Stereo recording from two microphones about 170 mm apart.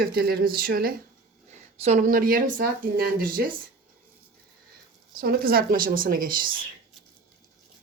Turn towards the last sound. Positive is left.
turn(degrees=-55)  # may be behind; listen again after turning